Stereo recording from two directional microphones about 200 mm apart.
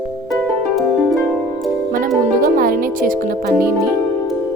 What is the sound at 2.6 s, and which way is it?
Speech, 45° right (ahead or behind).